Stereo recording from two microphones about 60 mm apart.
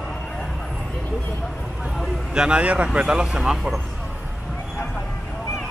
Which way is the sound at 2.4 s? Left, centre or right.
Centre.